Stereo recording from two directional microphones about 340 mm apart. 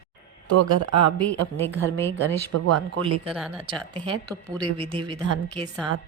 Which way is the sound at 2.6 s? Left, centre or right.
Right.